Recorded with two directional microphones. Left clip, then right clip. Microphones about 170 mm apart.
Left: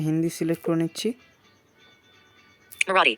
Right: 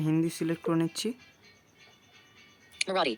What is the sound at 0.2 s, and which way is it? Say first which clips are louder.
Speech: left 4 dB; 15° left (ahead or behind).